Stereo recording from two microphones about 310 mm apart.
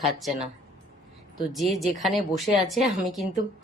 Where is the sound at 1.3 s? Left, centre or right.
Centre.